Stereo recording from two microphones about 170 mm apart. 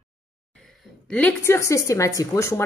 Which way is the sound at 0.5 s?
5° left (ahead or behind).